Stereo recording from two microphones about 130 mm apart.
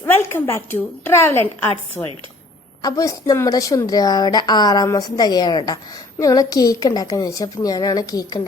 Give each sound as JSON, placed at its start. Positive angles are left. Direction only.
{"t": 0.0, "sound": "a woman's voice", "side_deg": 20}
{"t": 2.8, "sound": "a woman's voice", "side_deg": 25}